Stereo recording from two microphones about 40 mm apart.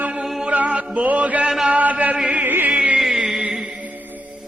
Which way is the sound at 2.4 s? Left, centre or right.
Right.